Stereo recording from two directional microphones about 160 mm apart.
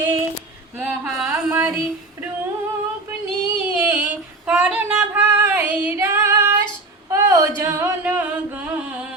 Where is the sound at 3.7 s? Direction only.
15° right (ahead or behind).